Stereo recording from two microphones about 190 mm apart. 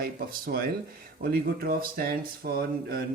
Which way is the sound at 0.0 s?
50° right (ahead or behind).